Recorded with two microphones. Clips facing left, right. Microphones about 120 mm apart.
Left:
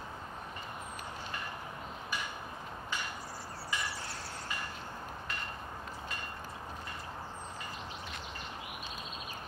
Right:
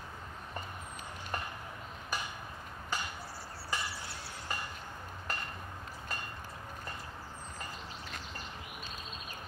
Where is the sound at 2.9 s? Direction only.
40° right (ahead or behind).